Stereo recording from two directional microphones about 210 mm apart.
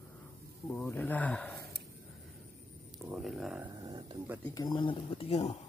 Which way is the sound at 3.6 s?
20° right (ahead or behind).